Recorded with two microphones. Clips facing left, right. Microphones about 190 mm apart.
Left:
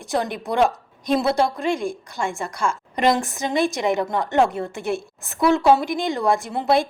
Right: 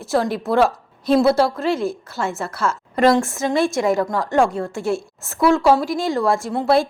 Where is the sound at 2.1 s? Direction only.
15° left (ahead or behind).